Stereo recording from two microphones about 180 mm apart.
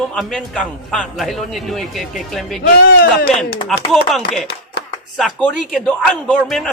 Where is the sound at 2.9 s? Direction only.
55° left (ahead or behind).